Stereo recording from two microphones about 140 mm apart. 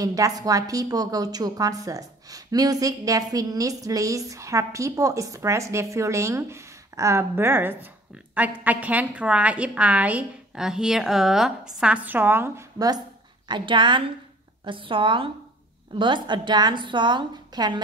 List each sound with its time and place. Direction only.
0.0 s a woman's voice: 25° right (ahead or behind)